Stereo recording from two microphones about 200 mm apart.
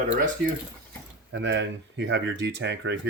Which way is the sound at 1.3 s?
65° right (ahead or behind).